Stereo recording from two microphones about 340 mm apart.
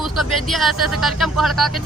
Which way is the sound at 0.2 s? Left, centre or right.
Centre.